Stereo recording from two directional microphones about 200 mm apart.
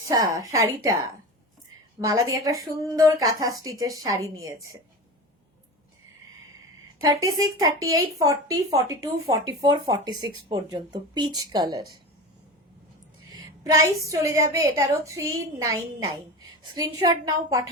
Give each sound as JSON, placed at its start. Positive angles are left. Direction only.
{"t": 0.1, "sound": "a woman's voice", "side_deg": -15}
{"t": 2.0, "sound": "a woman's voice", "side_deg": -15}
{"t": 7.6, "sound": "a woman's voice", "side_deg": -15}
{"t": 13.3, "sound": "a woman's voice", "side_deg": -15}